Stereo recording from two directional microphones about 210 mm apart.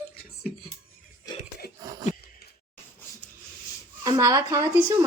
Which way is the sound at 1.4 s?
45° left (ahead or behind).